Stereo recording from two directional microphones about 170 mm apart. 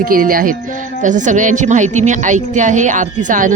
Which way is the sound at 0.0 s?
55° right (ahead or behind).